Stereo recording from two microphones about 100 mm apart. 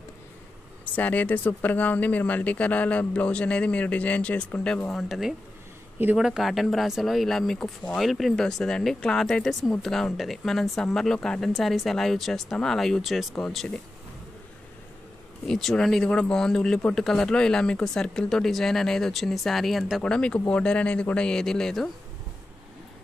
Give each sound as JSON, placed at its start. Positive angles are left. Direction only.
{"t": 0.9, "sound": "speech", "side_deg": 15}
{"t": 4.9, "sound": "speech", "side_deg": 0}
{"t": 15.4, "sound": "speech", "side_deg": 5}
{"t": 20.0, "sound": "speech", "side_deg": 10}